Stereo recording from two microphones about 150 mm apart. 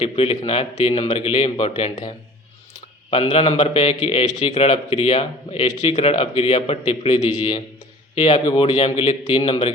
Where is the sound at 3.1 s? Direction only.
35° left (ahead or behind).